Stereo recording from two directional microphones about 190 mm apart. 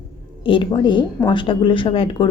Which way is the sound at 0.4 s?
25° left (ahead or behind).